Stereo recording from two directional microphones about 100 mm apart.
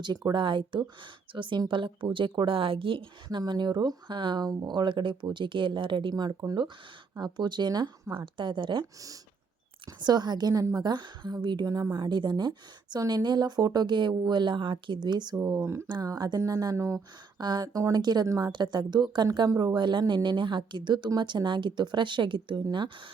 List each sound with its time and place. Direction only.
0.0 s speech: 45° right (ahead or behind); by 3.0 s 60° right (ahead or behind)
3.2 s speech: 45° right (ahead or behind)
10.0 s speech: 45° right (ahead or behind)
11.9 s speech: 50° right (ahead or behind)
15.4 s speech: 30° right (ahead or behind)
15.9 s speech: 40° right (ahead or behind)
17.3 s speech: 45° right (ahead or behind)